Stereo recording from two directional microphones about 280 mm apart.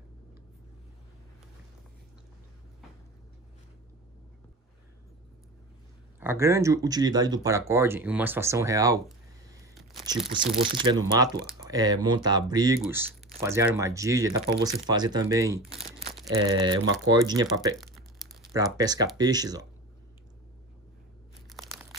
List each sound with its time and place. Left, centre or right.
6.1 s speech: centre
10.3 s speech: centre
17.7 s crumpling: centre
18.5 s speech: centre
21.5 s a sound: centre